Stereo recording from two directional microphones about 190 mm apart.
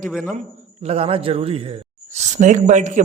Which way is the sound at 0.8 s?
30° right (ahead or behind).